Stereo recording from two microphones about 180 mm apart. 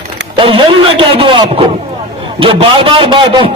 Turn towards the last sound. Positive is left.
turn(degrees=-25)  # may be behind; listen again after turning